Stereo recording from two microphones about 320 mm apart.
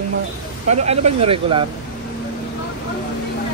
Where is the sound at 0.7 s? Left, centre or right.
Centre.